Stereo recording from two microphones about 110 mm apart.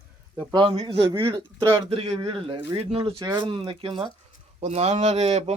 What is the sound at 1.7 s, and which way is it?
A man's voice, 60° right (ahead or behind).